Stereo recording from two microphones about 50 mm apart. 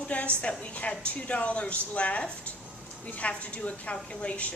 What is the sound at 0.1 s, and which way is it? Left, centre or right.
Speech, left.